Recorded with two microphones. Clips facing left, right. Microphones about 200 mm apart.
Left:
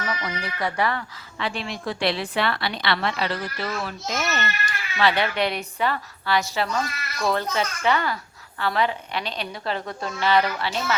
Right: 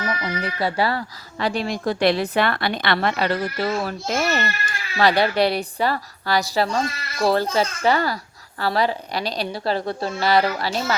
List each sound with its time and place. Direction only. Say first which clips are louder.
0.0 s a woman's voice: right 4 dB; 25° right (ahead or behind); by 4.2 s 50° right (ahead or behind)
4.2 s a woman's voice: right 3 dB; 35° right (ahead or behind)